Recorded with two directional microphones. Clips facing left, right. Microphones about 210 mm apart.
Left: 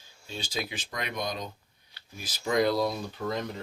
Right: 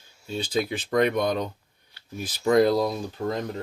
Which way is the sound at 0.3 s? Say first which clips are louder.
Right 9 dB; 55° right (ahead or behind).